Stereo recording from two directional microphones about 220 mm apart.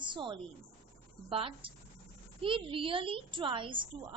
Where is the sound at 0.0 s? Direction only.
20° right (ahead or behind).